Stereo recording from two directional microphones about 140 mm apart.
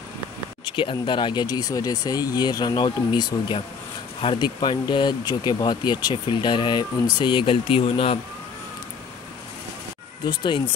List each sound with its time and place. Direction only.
0.7 s speech: 35° left (ahead or behind)
10.2 s speech: 35° left (ahead or behind)